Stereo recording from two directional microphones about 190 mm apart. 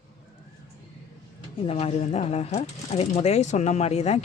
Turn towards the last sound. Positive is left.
turn(degrees=35)  # may be behind; listen again after turning